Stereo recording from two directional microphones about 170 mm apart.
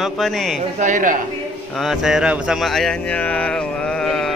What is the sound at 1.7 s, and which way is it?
Speech, centre (ahead or behind).